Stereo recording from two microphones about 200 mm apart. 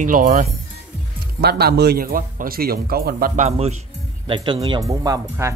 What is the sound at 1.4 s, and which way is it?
Speech, 55° right (ahead or behind).